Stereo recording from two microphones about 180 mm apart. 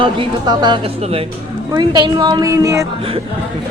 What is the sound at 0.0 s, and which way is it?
A woman's voice, 25° right (ahead or behind).